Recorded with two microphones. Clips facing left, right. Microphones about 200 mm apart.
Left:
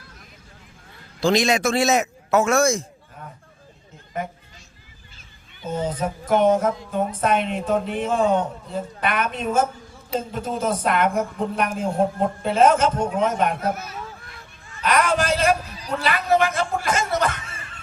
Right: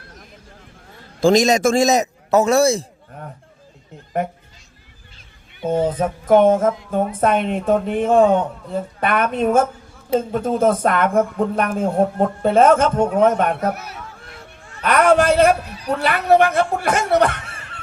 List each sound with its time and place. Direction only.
1.2 s a man's voice: 45° right (ahead or behind)
5.5 s a man's voice: 60° right (ahead or behind)